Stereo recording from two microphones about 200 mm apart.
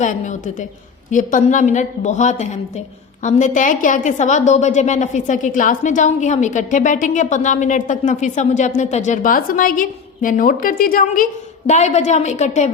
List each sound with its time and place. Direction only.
0.0 s a woman's voice: 40° left (ahead or behind)